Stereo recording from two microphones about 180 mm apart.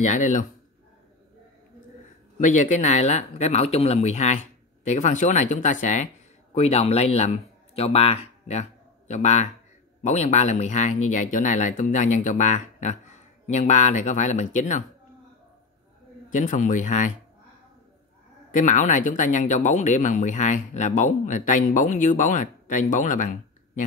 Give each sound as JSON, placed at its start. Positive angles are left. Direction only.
{"t": 0.0, "sound": "speech", "side_deg": 45}
{"t": 2.3, "sound": "speech", "side_deg": 45}
{"t": 16.3, "sound": "speech", "side_deg": 45}
{"t": 18.5, "sound": "speech", "side_deg": 45}